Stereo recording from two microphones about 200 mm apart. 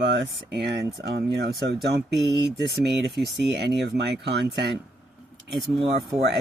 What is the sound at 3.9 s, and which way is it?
Speech, 55° right (ahead or behind).